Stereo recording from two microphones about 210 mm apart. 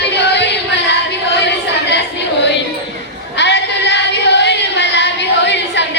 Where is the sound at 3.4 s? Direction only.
55° left (ahead or behind).